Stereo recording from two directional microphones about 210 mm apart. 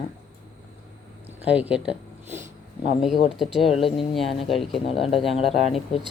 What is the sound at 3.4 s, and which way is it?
Speech, centre (ahead or behind).